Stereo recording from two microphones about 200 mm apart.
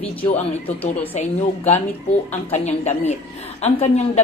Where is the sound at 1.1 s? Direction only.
30° left (ahead or behind).